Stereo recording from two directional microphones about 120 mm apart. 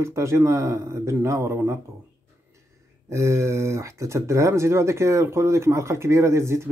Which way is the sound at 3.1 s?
25° right (ahead or behind).